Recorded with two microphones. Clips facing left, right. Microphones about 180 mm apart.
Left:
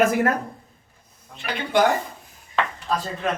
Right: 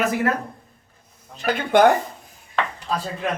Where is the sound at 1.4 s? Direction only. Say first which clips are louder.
Right 4 dB; 45° right (ahead or behind).